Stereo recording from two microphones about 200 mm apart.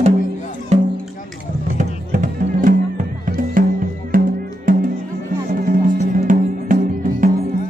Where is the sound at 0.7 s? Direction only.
35° right (ahead or behind).